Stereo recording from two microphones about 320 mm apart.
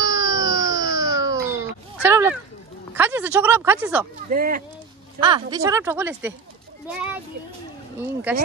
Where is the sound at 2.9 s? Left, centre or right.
Centre.